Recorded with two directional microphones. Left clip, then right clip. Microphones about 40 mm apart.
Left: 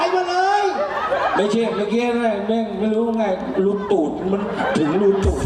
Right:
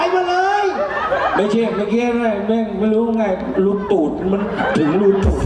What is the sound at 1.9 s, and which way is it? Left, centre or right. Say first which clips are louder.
Speech: right 2 dB; centre.